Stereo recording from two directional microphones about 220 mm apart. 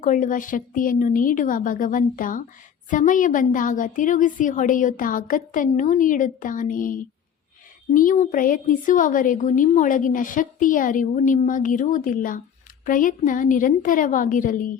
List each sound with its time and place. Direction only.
0.0 s a woman's voice: 35° left (ahead or behind)